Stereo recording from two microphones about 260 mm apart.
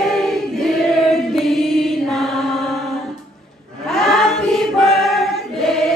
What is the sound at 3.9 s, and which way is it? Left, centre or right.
Choir, centre.